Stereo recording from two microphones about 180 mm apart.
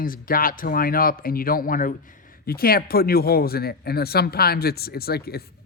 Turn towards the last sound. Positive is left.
turn(degrees=60)  # may be behind; listen again after turning